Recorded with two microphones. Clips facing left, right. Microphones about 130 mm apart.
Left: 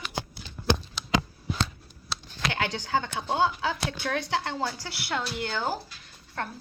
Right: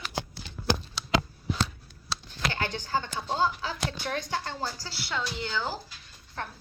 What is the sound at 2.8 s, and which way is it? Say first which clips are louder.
A woman's voice: left 2 dB; 65° left (ahead or behind).